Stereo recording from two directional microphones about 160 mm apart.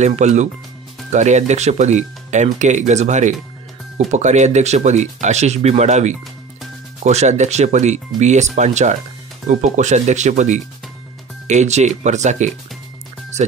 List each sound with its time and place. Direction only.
0.0 s speech: 45° right (ahead or behind)